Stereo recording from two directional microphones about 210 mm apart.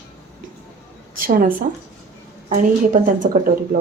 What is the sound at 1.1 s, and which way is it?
Speech, 40° right (ahead or behind).